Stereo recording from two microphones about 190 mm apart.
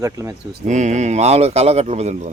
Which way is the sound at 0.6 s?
40° right (ahead or behind).